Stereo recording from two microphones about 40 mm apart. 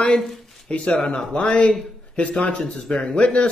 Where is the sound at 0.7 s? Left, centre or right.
Left.